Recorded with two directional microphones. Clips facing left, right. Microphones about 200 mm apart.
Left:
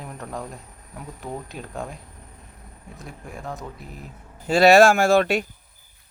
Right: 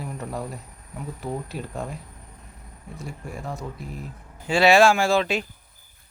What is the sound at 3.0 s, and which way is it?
Speech, centre (ahead or behind).